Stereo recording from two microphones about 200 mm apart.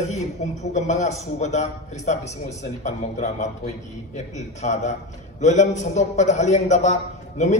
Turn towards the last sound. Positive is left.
turn(degrees=35)  # may be behind; listen again after turning